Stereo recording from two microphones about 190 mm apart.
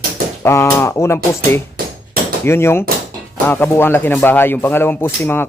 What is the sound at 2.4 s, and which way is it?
Speech, 15° left (ahead or behind).